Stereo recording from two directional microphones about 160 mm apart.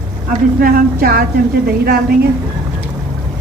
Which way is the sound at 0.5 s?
65° right (ahead or behind).